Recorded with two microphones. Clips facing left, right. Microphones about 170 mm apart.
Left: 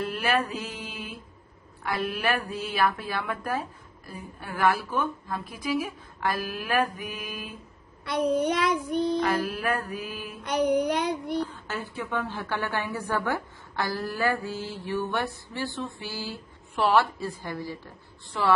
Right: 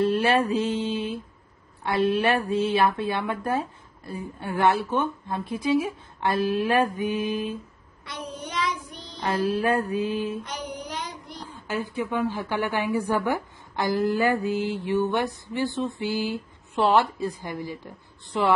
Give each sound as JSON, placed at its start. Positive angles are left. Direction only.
{"t": 0.0, "sound": "speech", "side_deg": -30}
{"t": 8.0, "sound": "child singing", "side_deg": 60}
{"t": 9.2, "sound": "speech", "side_deg": -30}
{"t": 10.4, "sound": "child singing", "side_deg": 60}
{"t": 11.4, "sound": "speech", "side_deg": -15}